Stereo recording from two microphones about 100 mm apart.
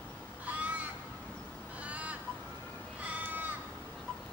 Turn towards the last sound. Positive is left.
turn(degrees=-15)  # may be behind; listen again after turning